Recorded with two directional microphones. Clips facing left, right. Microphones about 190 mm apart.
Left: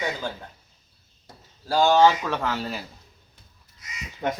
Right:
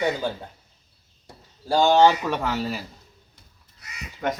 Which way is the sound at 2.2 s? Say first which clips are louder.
Right 2 dB; 10° right (ahead or behind).